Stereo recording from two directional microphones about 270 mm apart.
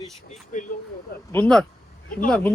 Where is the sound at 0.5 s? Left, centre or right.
Left.